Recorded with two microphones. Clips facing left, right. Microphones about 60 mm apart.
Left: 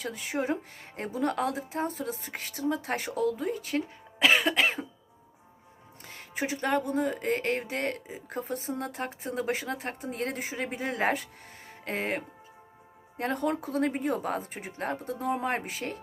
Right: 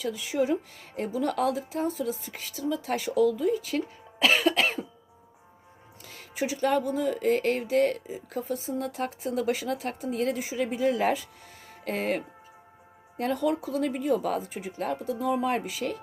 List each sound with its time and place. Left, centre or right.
0.0 s speech: left
4.2 s cough: left
6.1 s speech: left